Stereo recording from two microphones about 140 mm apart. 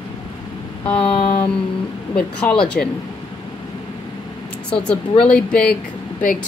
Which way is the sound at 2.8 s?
90° left.